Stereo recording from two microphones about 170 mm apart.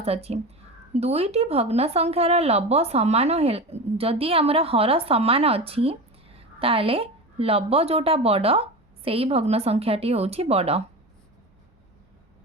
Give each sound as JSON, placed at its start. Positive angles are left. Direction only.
{"t": 0.0, "sound": "speech", "side_deg": -35}